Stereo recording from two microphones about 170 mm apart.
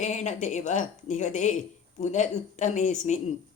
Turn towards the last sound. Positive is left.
turn(degrees=45)  # may be behind; listen again after turning